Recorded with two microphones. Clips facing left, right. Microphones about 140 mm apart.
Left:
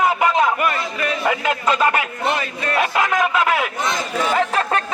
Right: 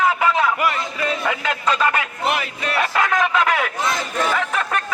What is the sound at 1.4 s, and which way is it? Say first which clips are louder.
Speech: left 2 dB; 10° left (ahead or behind).